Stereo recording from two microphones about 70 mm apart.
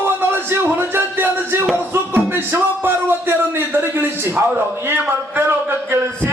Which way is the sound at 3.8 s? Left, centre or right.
Right.